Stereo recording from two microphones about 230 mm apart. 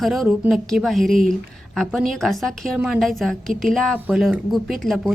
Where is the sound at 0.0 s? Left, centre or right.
Centre.